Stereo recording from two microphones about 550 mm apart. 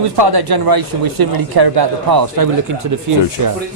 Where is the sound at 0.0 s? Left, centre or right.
Right.